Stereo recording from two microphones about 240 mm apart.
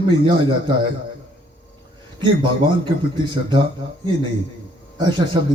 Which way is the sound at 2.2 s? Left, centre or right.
Centre.